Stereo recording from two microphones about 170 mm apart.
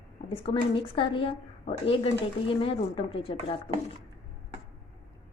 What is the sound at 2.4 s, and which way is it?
Speech, 30° left (ahead or behind).